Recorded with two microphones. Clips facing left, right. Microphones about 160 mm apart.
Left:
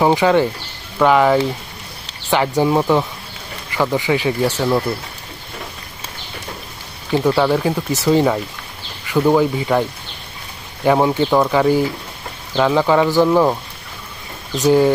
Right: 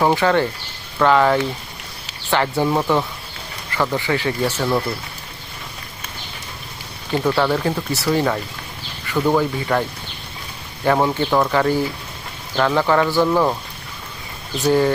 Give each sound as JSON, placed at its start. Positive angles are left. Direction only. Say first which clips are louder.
{"t": 0.0, "sound": "speech", "louder": "left 3 dB", "side_deg": 15}
{"t": 7.1, "sound": "speech", "louder": "left 3 dB", "side_deg": 10}
{"t": 10.8, "sound": "speech", "louder": "left 3 dB", "side_deg": 10}
{"t": 14.7, "sound": "speech", "louder": "left 3 dB", "side_deg": 15}